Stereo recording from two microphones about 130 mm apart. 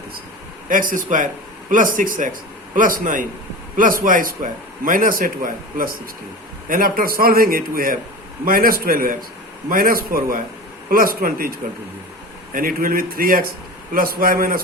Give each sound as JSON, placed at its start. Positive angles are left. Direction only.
{"t": 0.7, "sound": "a man's voice", "side_deg": -90}
{"t": 12.5, "sound": "a man's voice", "side_deg": -90}